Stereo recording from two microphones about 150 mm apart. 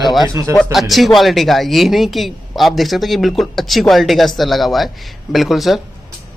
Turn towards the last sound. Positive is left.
turn(degrees=0)  # may be behind; listen again after turning